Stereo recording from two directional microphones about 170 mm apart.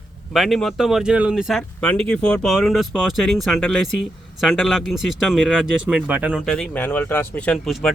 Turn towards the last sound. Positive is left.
turn(degrees=0)  # may be behind; listen again after turning